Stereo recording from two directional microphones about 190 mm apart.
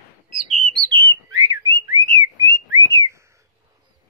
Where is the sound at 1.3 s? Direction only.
20° right (ahead or behind).